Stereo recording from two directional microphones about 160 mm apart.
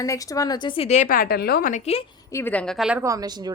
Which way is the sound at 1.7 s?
40° left (ahead or behind).